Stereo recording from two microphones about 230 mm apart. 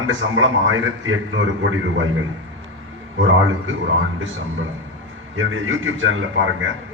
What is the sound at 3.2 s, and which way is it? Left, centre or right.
Speech, right.